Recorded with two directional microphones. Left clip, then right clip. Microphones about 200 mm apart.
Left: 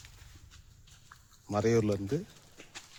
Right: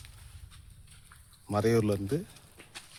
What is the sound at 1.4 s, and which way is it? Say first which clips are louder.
Speech: right 1 dB; 10° right (ahead or behind).